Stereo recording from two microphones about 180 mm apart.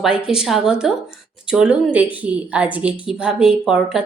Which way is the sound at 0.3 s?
Centre (ahead or behind).